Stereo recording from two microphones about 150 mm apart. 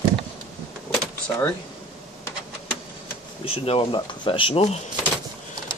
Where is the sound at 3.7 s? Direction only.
35° left (ahead or behind).